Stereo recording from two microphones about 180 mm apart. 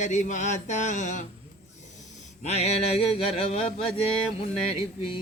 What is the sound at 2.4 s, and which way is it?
A man's voice, 35° left (ahead or behind).